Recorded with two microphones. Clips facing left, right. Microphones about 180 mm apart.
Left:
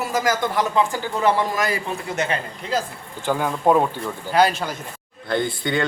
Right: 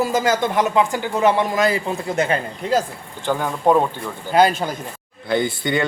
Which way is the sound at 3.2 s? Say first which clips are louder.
Right 1 dB; 5° left (ahead or behind).